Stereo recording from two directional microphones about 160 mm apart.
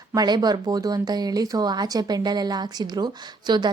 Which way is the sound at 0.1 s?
25° right (ahead or behind).